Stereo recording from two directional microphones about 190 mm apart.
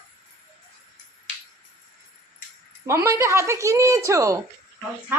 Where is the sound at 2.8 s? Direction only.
15° right (ahead or behind).